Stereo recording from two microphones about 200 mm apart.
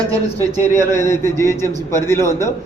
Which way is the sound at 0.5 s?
10° left (ahead or behind).